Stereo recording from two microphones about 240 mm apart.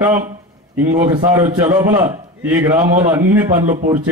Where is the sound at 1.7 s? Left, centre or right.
Centre.